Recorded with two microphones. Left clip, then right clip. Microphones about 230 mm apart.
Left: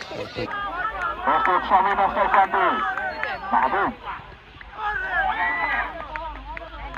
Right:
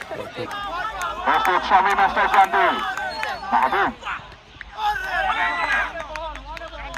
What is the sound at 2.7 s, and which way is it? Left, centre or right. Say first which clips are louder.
Run: even; right.